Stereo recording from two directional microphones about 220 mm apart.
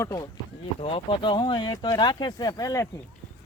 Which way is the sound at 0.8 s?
25° left (ahead or behind).